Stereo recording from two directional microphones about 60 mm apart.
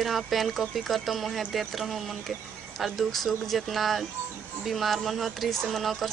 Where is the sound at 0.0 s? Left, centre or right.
Centre.